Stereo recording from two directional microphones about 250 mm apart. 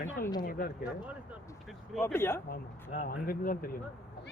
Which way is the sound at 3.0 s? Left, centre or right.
Left.